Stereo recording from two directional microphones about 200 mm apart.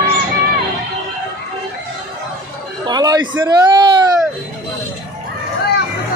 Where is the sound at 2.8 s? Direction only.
20° right (ahead or behind).